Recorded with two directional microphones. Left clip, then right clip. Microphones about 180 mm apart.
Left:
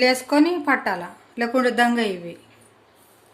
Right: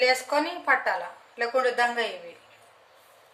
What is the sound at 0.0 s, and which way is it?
Speech, 45° left (ahead or behind).